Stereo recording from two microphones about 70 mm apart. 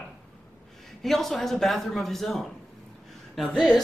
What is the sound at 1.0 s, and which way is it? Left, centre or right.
Speech, centre.